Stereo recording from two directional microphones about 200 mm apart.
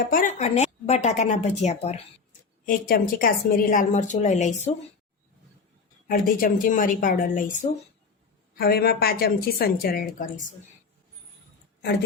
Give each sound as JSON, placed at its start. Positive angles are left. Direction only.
{"t": 0.1, "sound": "a woman's voice", "side_deg": 40}
{"t": 2.6, "sound": "a woman's voice", "side_deg": 45}
{"t": 6.1, "sound": "a woman's voice", "side_deg": 45}
{"t": 8.5, "sound": "a woman's voice", "side_deg": 50}